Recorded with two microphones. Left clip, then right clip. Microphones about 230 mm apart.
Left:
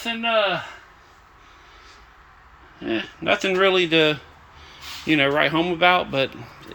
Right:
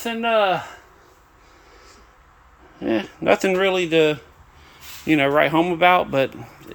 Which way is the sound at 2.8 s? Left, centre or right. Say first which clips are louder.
Right 3 dB; right.